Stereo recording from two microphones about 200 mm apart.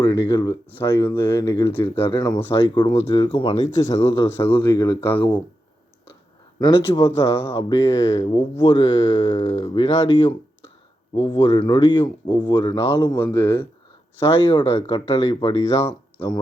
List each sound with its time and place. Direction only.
0.0 s speech: 20° left (ahead or behind)
3.8 s speech: 15° left (ahead or behind)
6.6 s speech: 25° left (ahead or behind)
13.3 s speech: 10° left (ahead or behind)
14.5 s speech: 25° left (ahead or behind)